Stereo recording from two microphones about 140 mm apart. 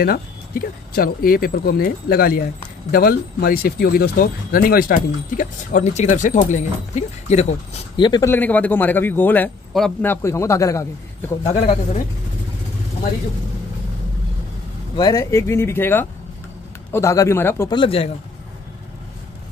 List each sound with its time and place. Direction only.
0.0 s speech: 90° left; by 7.8 s 50° left (ahead or behind)
7.9 s speech: 30° left (ahead or behind)
8.3 s a man's voice: 10° left (ahead or behind)
11.4 s speech: 50° left (ahead or behind)
15.0 s a man's voice: 25° left (ahead or behind)
17.6 s speech: 40° left (ahead or behind)